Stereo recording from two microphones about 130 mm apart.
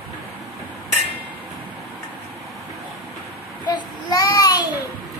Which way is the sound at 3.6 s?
30° left (ahead or behind).